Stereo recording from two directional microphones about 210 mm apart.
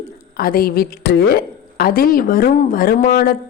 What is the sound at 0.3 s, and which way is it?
A woman's voice, 45° left (ahead or behind).